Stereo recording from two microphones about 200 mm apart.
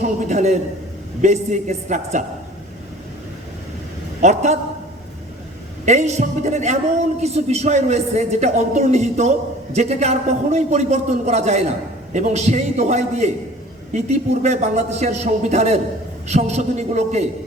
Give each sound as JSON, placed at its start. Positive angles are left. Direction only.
{"t": 0.0, "sound": "speech", "side_deg": -35}
{"t": 4.2, "sound": "speech", "side_deg": -35}
{"t": 5.8, "sound": "speech", "side_deg": -35}